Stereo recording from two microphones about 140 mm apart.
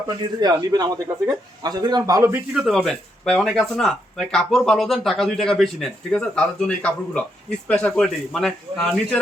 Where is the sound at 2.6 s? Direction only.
Centre (ahead or behind).